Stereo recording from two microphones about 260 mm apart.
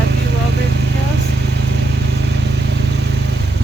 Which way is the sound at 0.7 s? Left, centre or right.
Right.